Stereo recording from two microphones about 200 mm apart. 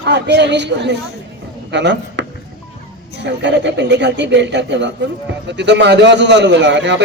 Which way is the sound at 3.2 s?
60° right (ahead or behind).